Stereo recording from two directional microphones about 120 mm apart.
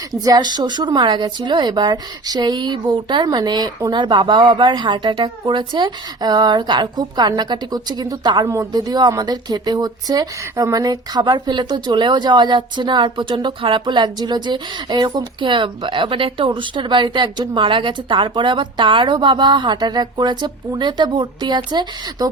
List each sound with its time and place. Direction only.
0.1 s speech: 35° right (ahead or behind)